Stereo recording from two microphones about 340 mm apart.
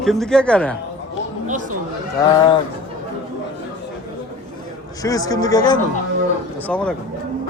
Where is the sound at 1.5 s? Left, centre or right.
Right.